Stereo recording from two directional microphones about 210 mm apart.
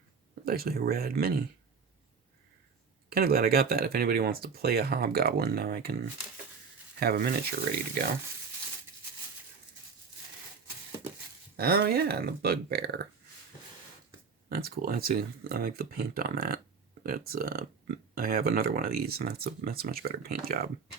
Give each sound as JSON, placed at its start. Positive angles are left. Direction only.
{"t": 0.4, "sound": "speech", "side_deg": -45}
{"t": 3.1, "sound": "speech", "side_deg": -45}
{"t": 7.0, "sound": "speech", "side_deg": -45}
{"t": 11.5, "sound": "speech", "side_deg": -45}
{"t": 14.5, "sound": "speech", "side_deg": -45}